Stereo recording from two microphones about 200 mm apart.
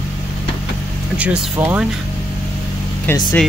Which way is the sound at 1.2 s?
5° right (ahead or behind).